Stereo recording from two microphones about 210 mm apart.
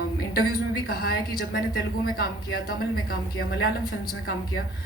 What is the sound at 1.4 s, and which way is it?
Speech, 45° left (ahead or behind).